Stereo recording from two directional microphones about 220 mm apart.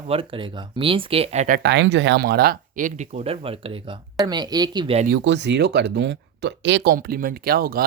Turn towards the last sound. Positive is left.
turn(degrees=-40)  # may be behind; listen again after turning